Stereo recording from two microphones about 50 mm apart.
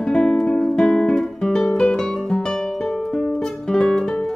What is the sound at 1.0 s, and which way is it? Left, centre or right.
Guitar, centre.